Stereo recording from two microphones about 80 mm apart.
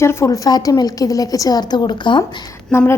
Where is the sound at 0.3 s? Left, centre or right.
Left.